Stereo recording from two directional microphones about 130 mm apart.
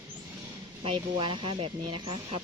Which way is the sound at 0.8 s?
40° right (ahead or behind).